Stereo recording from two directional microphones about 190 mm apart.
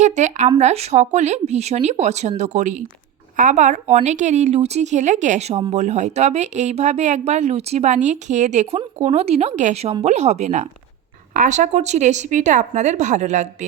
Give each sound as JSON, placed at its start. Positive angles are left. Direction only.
{"t": 0.0, "sound": "speech", "side_deg": -40}